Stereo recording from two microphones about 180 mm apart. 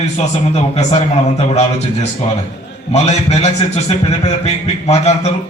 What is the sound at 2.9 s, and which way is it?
A man's voice, 35° left (ahead or behind).